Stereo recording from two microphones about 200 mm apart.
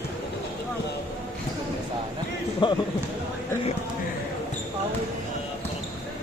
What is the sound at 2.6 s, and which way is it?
Speech, 25° left (ahead or behind).